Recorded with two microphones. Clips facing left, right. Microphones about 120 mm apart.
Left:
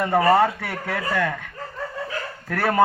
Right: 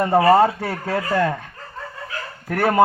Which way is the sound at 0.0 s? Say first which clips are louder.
Right 3 dB; 25° right (ahead or behind).